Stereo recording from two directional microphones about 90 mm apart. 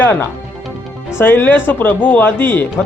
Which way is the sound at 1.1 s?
25° left (ahead or behind).